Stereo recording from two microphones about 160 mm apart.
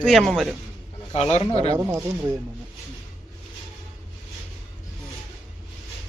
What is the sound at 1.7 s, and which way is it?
Speech, 20° right (ahead or behind).